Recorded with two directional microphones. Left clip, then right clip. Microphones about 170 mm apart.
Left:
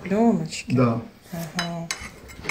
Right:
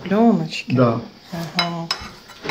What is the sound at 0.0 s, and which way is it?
Speech, centre (ahead or behind).